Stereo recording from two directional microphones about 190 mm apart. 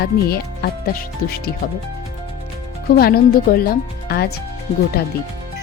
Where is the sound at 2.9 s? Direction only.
55° left (ahead or behind).